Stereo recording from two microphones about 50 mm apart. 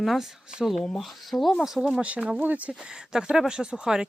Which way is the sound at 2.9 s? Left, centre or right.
Centre.